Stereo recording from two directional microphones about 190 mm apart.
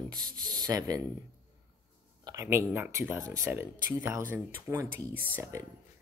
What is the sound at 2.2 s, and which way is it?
Speech, 15° right (ahead or behind).